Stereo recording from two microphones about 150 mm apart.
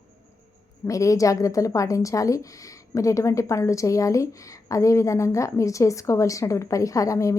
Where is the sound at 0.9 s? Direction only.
20° left (ahead or behind).